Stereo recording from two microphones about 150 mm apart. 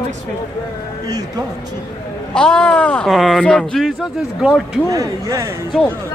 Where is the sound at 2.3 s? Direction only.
5° left (ahead or behind).